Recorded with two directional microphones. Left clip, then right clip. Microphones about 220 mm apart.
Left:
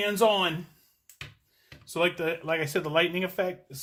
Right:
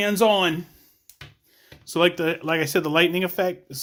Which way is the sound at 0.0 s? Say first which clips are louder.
Right 4 dB; 45° right (ahead or behind).